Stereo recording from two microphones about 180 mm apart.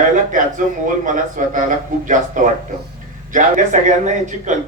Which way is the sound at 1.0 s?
45° right (ahead or behind).